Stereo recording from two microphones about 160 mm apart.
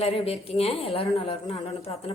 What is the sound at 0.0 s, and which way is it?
Speech, 40° left (ahead or behind).